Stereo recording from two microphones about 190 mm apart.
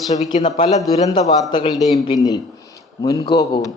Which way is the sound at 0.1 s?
35° left (ahead or behind).